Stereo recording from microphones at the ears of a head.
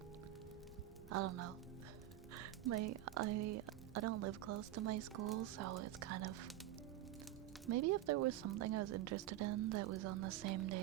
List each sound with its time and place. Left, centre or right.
1.1 s speech: right
7.7 s speech: right